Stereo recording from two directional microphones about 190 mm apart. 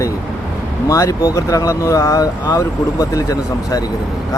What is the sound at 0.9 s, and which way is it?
Speech, 15° left (ahead or behind).